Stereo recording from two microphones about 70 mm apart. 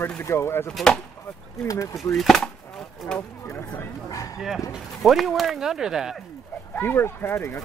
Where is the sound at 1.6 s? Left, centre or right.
Left.